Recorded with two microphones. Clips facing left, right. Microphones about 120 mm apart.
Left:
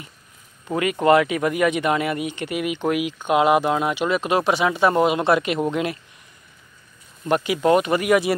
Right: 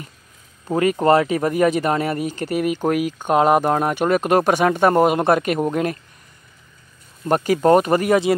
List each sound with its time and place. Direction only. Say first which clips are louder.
0.7 s speech: right 2 dB; 40° right (ahead or behind)
7.2 s speech: right 3 dB; 40° right (ahead or behind)